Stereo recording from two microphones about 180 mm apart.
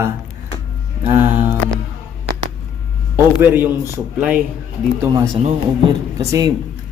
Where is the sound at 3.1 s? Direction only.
10° right (ahead or behind).